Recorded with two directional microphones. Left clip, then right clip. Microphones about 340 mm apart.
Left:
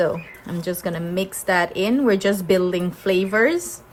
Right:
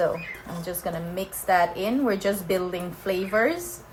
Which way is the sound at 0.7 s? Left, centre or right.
Left.